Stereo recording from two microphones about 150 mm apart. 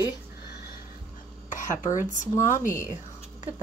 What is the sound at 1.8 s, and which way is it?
Speech, 55° left (ahead or behind).